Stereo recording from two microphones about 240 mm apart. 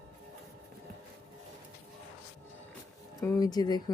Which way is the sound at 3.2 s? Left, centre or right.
Centre.